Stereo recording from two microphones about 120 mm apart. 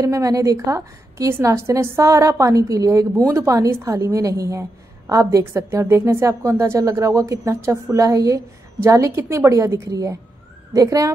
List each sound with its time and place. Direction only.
0.0 s a woman's voice: 30° right (ahead or behind)